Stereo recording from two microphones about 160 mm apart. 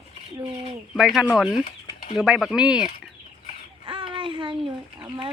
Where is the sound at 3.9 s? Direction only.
30° right (ahead or behind).